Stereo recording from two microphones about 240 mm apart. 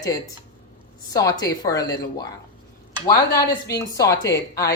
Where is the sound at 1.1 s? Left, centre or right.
Centre.